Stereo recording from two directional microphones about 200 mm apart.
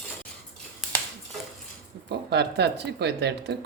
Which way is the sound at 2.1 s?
55° right (ahead or behind).